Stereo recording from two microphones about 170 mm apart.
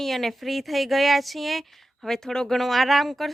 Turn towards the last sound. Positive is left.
turn(degrees=0)  # may be behind; listen again after turning